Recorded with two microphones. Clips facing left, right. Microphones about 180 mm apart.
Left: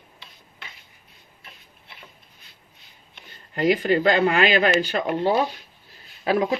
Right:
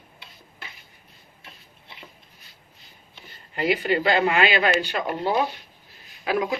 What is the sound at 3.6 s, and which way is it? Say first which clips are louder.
Speech: left 3 dB; 40° left (ahead or behind).